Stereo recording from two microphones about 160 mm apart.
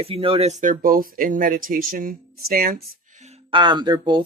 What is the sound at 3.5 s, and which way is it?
Speech, 30° right (ahead or behind).